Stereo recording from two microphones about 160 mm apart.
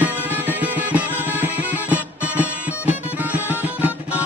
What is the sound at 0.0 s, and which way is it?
Music, 10° right (ahead or behind).